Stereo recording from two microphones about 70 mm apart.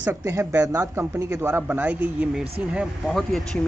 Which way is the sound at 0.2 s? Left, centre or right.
Right.